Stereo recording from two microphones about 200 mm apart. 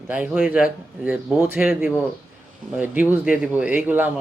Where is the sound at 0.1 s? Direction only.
5° right (ahead or behind).